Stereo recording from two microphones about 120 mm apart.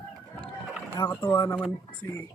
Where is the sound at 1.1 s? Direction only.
15° left (ahead or behind).